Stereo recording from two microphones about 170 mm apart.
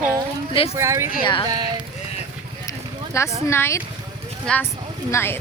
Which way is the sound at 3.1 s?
15° left (ahead or behind).